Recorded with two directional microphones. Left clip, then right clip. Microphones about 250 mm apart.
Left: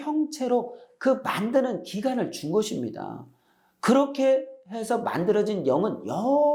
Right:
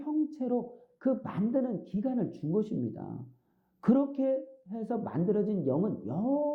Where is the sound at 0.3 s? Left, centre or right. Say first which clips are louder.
Left 8 dB; centre.